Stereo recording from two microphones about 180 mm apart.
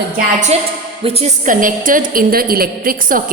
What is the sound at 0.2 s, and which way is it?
A woman's voice, 45° right (ahead or behind).